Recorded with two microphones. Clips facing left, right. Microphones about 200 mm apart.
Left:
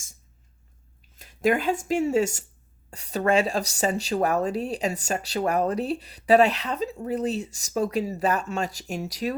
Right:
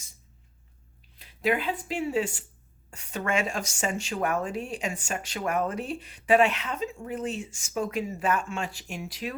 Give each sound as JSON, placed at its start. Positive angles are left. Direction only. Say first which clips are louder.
{"t": 1.1, "sound": "speech", "louder": "left 4 dB", "side_deg": 45}